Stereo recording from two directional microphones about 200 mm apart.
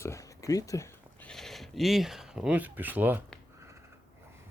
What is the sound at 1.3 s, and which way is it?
Speech, centre (ahead or behind).